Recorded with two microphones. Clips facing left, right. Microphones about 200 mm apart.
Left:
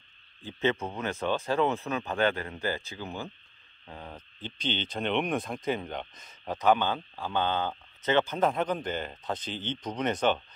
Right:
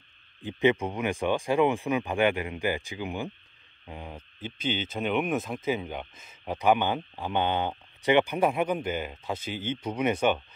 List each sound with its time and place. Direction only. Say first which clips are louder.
0.4 s speech: right 5 dB; 15° right (ahead or behind)